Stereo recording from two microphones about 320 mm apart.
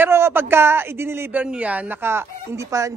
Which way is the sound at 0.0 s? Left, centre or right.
Centre.